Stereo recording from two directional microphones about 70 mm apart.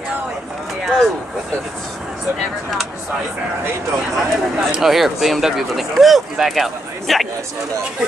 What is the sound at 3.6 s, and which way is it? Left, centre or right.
Speech, right.